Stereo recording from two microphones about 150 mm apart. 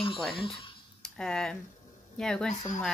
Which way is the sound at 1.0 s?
5° left (ahead or behind).